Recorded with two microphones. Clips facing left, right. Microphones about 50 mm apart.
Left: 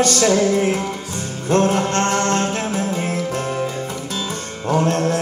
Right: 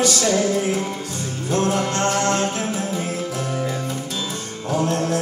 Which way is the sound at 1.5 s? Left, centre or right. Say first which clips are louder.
Left 4 dB; left.